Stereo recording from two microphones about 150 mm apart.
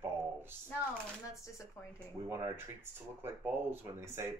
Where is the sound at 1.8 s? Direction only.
20° left (ahead or behind).